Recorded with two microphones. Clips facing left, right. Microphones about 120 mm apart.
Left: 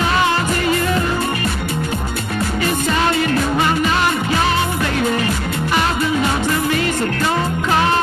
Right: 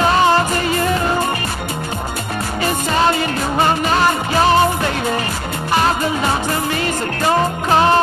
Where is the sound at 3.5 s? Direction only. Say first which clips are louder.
Right 1 dB; 40° right (ahead or behind).